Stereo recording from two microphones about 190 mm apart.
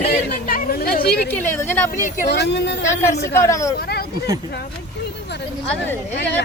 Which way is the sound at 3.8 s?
55° left (ahead or behind).